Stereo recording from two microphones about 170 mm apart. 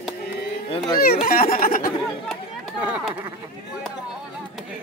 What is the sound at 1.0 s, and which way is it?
Speech, 60° left (ahead or behind).